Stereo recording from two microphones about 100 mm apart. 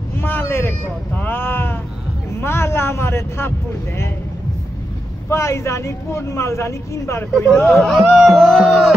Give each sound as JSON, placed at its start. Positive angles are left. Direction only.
{"t": 0.2, "sound": "speech", "side_deg": 20}
{"t": 5.3, "sound": "speech", "side_deg": 30}
{"t": 7.5, "sound": "speech", "side_deg": 0}